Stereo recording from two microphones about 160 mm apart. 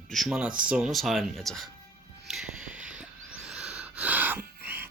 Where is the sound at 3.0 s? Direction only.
5° right (ahead or behind).